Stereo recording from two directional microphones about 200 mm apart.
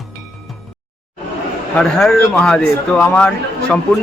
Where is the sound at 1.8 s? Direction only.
5° left (ahead or behind).